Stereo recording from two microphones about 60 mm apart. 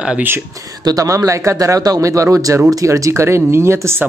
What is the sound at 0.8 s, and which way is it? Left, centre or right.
Speech, right.